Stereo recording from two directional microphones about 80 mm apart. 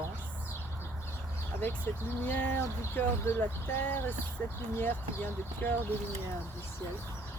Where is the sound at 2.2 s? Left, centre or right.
Left.